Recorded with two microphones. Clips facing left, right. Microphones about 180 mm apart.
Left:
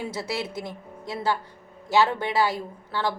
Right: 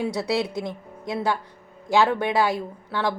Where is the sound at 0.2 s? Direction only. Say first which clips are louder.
Right 5 dB; 20° right (ahead or behind).